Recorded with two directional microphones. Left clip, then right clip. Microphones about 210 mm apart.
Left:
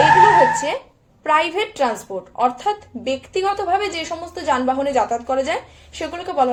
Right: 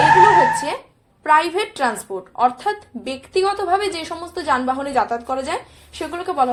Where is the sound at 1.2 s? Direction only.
15° right (ahead or behind).